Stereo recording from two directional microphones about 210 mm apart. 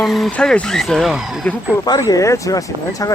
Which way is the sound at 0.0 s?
Centre (ahead or behind).